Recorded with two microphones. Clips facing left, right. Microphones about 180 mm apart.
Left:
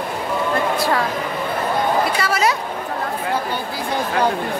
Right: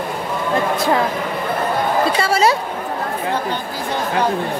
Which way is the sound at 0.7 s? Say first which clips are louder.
Right 2 dB; 20° right (ahead or behind).